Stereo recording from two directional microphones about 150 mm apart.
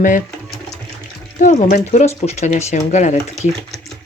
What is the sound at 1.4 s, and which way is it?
Speech, 50° left (ahead or behind).